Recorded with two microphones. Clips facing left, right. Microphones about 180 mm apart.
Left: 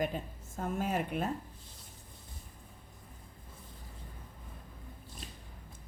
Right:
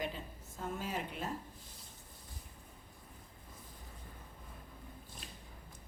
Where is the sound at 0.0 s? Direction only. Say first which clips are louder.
Left 6 dB; 50° left (ahead or behind).